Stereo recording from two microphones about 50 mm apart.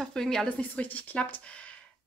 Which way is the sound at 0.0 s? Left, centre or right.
Centre.